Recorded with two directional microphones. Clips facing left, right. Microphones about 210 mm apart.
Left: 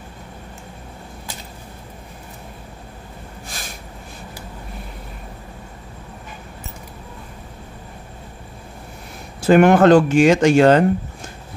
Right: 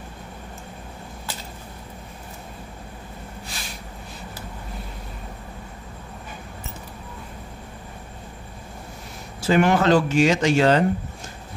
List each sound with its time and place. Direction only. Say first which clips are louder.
3.4 s snort: left 5 dB; 45° left (ahead or behind)
9.4 s speech: left 7 dB; 55° left (ahead or behind)